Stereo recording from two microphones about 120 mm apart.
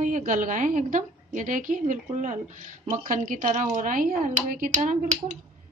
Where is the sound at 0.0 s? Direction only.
90° right.